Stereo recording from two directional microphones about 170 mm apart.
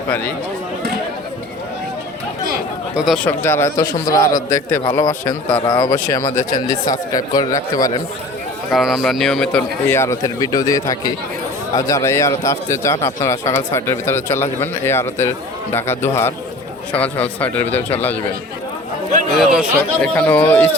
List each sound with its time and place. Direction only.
2.9 s speech: centre (ahead or behind)
3.2 s speech: 15° left (ahead or behind)
5.5 s speech: 30° left (ahead or behind)
6.0 s speech: 15° left (ahead or behind)
8.7 s speech: centre (ahead or behind)
19.4 s speech: 5° right (ahead or behind)
20.1 s speech: 10° left (ahead or behind)